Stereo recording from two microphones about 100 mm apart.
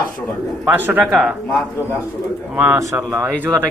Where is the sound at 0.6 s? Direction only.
15° right (ahead or behind).